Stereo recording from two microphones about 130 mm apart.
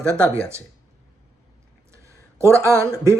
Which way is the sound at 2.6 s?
20° right (ahead or behind).